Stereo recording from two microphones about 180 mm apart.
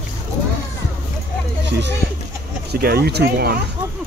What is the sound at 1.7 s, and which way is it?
Speech, 70° right (ahead or behind).